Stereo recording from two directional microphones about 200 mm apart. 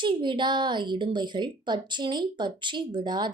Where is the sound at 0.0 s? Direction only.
25° right (ahead or behind).